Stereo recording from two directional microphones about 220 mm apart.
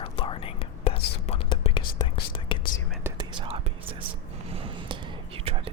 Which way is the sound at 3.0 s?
20° right (ahead or behind).